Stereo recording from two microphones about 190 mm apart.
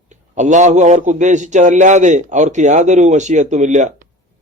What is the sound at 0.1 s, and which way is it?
A man's voice, 40° right (ahead or behind).